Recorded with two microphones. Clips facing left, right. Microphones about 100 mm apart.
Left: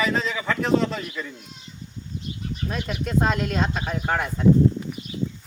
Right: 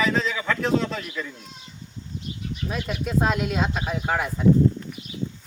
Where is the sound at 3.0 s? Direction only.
5° right (ahead or behind).